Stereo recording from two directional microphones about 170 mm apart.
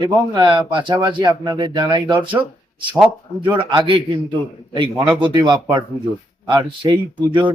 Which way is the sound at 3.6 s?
30° right (ahead or behind).